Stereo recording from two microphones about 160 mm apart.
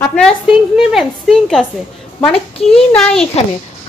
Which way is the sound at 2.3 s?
35° left (ahead or behind).